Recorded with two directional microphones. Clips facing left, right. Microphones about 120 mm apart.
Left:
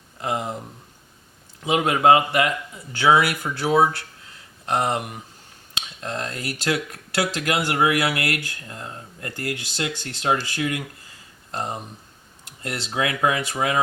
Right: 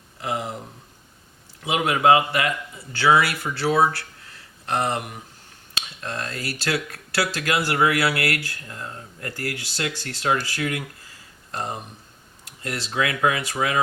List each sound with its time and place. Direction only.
0.2 s speech: 25° left (ahead or behind)
1.8 s a man's voice: 35° left (ahead or behind)
13.0 s speech: 25° left (ahead or behind)